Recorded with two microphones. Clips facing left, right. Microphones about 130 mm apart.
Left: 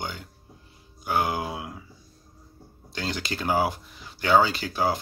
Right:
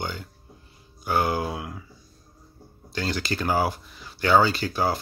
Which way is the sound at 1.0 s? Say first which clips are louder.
Right 2 dB; 15° left (ahead or behind).